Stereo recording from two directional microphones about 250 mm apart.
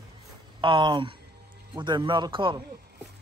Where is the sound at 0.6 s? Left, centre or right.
Centre.